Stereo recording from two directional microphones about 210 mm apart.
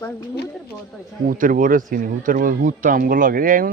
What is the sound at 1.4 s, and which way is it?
Speech, 40° right (ahead or behind).